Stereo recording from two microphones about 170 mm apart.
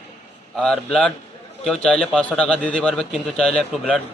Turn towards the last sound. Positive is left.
turn(degrees=0)  # may be behind; listen again after turning